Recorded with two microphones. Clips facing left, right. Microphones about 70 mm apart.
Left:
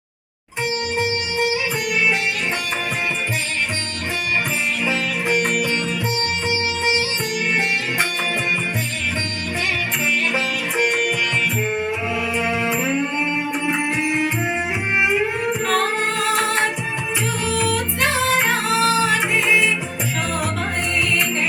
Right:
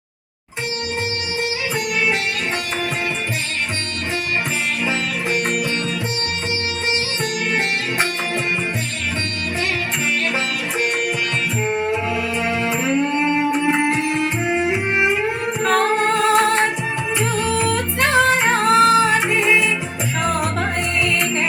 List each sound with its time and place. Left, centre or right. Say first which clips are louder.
11.6 s music: right 2 dB; right
12.8 s music: right 3 dB; right
15.6 s music: right 6 dB; right
17.5 s music: right 1 dB; right